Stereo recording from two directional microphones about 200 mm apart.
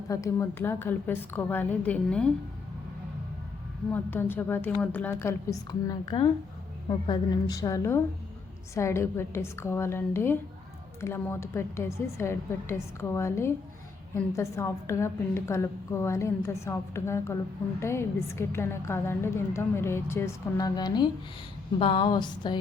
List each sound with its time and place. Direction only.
0.1 s a woman's voice: 15° left (ahead or behind)
3.9 s a woman's voice: 10° left (ahead or behind)